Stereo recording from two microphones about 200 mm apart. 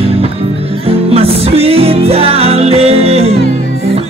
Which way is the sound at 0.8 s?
30° right (ahead or behind).